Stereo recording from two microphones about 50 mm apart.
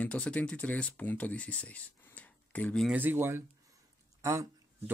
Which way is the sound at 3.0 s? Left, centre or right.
Right.